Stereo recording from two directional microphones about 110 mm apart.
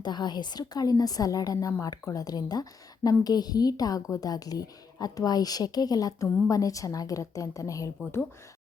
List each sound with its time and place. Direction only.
0.0 s speech: 40° left (ahead or behind)